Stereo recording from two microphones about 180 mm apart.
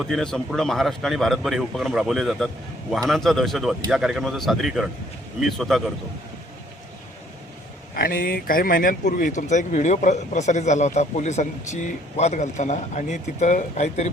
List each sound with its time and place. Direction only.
0.0 s a man's voice: 5° left (ahead or behind)
7.9 s speech: 55° left (ahead or behind)